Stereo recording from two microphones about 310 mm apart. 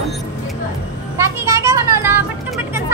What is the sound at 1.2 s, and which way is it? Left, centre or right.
Vehicle, centre.